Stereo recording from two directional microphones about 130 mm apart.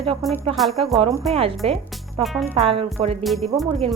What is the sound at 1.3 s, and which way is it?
Stir, 45° right (ahead or behind).